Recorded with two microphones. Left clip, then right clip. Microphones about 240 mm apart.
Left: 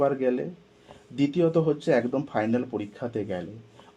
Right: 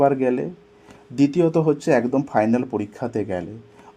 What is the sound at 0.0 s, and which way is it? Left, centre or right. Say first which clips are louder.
Speech: right 6 dB; right.